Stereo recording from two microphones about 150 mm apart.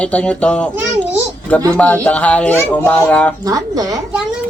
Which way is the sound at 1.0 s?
10° left (ahead or behind).